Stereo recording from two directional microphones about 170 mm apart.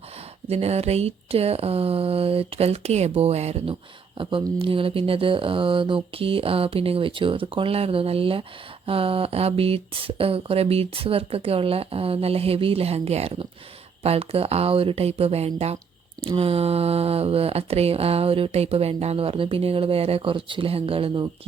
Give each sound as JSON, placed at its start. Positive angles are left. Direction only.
{"t": 0.4, "sound": "speech", "side_deg": -35}